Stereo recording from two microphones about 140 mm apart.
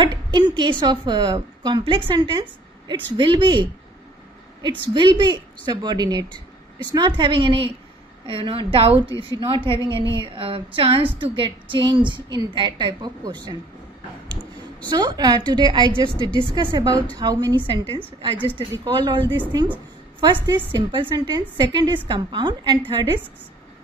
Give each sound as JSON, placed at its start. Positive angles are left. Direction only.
{"t": 0.0, "sound": "a woman's voice", "side_deg": -30}
{"t": 4.9, "sound": "a woman's voice", "side_deg": -35}
{"t": 14.9, "sound": "a woman's voice", "side_deg": -30}